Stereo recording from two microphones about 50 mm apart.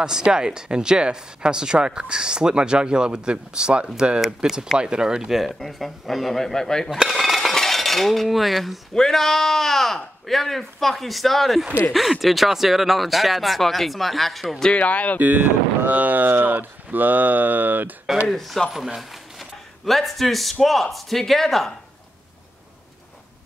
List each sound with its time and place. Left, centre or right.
0.0 s speech: centre
6.9 s cutlery: centre
7.5 s a sound: centre
8.9 s speech: centre
14.8 s speech: left
15.1 s speech: right
18.3 s speech: centre
19.9 s speech: centre